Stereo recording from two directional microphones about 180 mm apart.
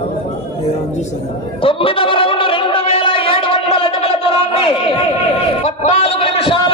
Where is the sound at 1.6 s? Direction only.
30° left (ahead or behind).